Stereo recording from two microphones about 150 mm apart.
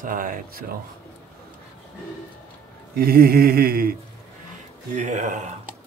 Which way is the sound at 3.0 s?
85° right.